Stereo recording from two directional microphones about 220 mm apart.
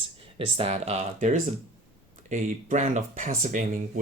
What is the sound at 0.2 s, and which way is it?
Speech, 25° right (ahead or behind).